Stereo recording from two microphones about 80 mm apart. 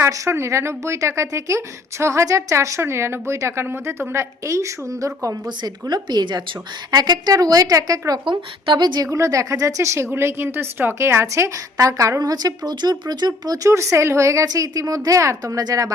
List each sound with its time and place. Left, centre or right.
0.0 s speech: right
5.9 s speech: right
8.2 s speech: right
9.0 s speech: right